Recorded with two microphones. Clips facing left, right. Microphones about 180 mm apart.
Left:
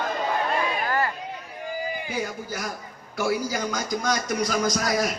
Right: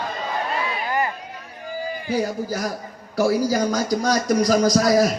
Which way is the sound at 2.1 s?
35° right (ahead or behind).